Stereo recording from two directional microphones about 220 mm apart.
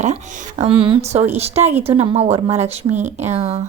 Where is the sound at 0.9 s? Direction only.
30° right (ahead or behind).